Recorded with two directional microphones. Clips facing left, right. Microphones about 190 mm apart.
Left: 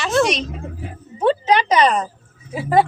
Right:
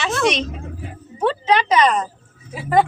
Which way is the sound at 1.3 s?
35° left (ahead or behind).